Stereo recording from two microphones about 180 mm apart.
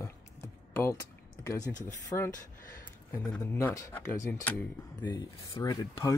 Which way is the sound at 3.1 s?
5° left (ahead or behind).